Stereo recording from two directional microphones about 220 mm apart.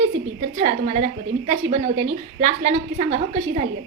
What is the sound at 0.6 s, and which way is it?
A woman's voice, 35° right (ahead or behind).